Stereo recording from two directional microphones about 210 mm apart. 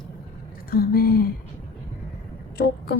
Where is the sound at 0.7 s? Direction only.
45° left (ahead or behind).